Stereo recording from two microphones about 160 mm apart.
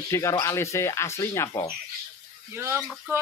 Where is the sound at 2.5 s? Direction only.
15° right (ahead or behind).